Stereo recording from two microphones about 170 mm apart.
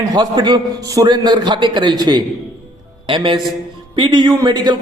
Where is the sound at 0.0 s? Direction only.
20° right (ahead or behind).